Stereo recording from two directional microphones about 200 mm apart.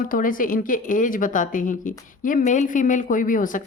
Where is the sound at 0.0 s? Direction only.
45° left (ahead or behind).